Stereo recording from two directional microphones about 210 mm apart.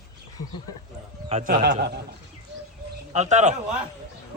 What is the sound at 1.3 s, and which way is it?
Speech, 40° right (ahead or behind).